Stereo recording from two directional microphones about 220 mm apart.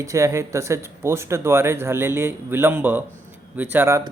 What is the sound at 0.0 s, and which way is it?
Speech, 15° right (ahead or behind).